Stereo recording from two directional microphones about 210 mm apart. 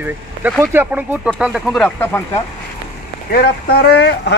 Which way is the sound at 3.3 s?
50° left (ahead or behind).